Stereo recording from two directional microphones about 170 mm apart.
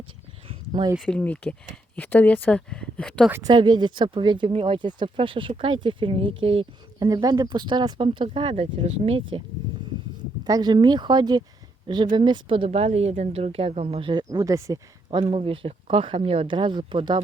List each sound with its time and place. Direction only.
0.4 s a sound: 25° right (ahead or behind)
0.9 s speech: 5° left (ahead or behind)
3.4 s speech: 25° right (ahead or behind)
7.1 s speech: 20° right (ahead or behind)
10.4 s speech: 25° right (ahead or behind)
15.3 s speech: 35° right (ahead or behind)